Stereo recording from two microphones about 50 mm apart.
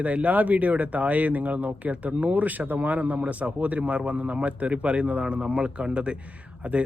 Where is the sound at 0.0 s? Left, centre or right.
Right.